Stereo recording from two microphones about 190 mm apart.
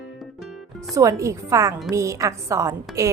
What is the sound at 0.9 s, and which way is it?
A woman's voice, 15° right (ahead or behind).